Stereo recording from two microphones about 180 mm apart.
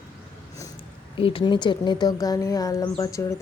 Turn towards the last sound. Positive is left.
turn(degrees=15)  # may be behind; listen again after turning